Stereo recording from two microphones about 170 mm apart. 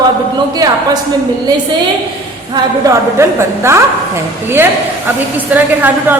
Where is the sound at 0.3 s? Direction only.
25° right (ahead or behind).